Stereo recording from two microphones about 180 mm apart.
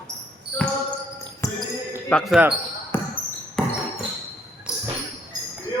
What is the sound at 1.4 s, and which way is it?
Basketball bounce, 15° left (ahead or behind).